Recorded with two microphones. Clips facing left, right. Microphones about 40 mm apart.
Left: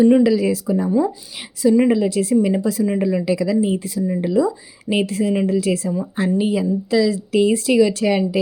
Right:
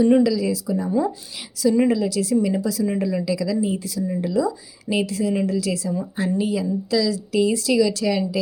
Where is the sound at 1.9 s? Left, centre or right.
Left.